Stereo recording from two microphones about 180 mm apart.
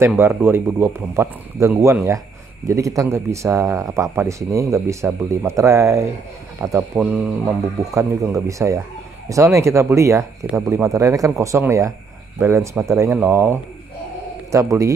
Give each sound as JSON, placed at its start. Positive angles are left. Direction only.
{"t": 0.2, "sound": "speech", "side_deg": -10}
{"t": 7.0, "sound": "speech", "side_deg": -5}
{"t": 7.6, "sound": "speech", "side_deg": -15}